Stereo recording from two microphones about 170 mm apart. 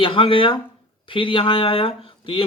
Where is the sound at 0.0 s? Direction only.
30° left (ahead or behind).